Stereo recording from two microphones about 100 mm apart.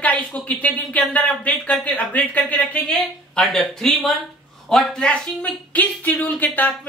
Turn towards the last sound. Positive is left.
turn(degrees=15)  # may be behind; listen again after turning